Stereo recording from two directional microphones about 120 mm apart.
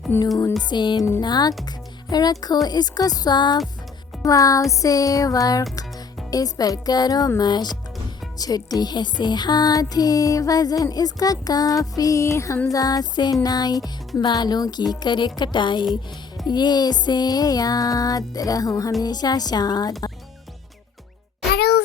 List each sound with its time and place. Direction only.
0.1 s speech: 20° left (ahead or behind)
0.7 s music: 40° left (ahead or behind)
4.7 s speech: 30° left (ahead or behind)
6.3 s music: 30° left (ahead or behind)